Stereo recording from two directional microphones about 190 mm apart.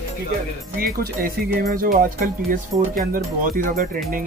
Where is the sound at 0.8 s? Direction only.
50° right (ahead or behind).